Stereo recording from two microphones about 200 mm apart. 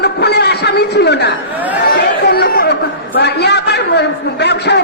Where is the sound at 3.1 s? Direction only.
55° left (ahead or behind).